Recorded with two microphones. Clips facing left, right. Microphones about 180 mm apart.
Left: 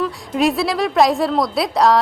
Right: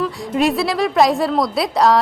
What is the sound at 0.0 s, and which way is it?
A woman's voice, centre (ahead or behind).